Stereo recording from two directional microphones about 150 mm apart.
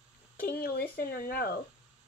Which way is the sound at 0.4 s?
90° left.